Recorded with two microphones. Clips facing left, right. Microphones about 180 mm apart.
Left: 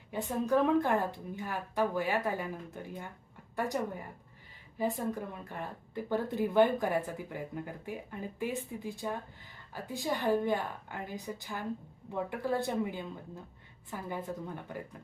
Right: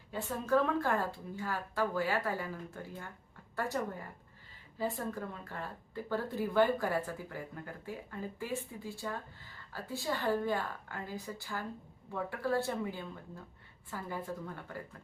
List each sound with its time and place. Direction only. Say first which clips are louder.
0.1 s speech: left 2 dB; 15° left (ahead or behind)